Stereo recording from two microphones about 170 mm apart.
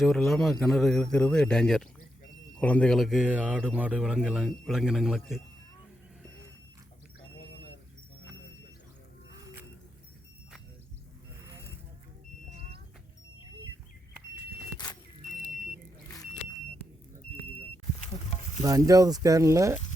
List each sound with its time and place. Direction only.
0.0 s speech: centre (ahead or behind)
11.4 s vehicle: 15° right (ahead or behind)
12.5 s vehicle: 35° right (ahead or behind)
18.1 s a sound: 40° left (ahead or behind)
18.6 s speech: 20° right (ahead or behind)